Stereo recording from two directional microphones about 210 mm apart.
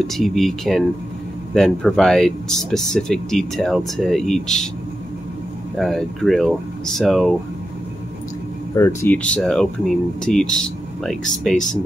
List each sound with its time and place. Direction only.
0.0 s speech: centre (ahead or behind)
5.8 s speech: centre (ahead or behind)
8.7 s speech: 10° left (ahead or behind)